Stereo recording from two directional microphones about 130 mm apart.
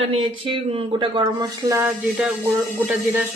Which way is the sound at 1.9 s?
5° right (ahead or behind).